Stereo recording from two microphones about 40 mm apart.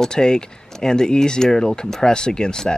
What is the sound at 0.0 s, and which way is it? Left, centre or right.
Speech, centre.